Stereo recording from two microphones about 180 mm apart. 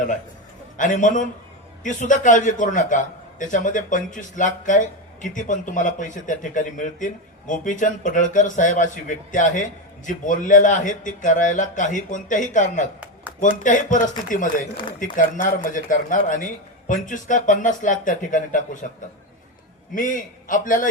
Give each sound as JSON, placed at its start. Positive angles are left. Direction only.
{"t": 0.8, "sound": "a man's voice", "side_deg": 45}
{"t": 19.9, "sound": "a man's voice", "side_deg": 45}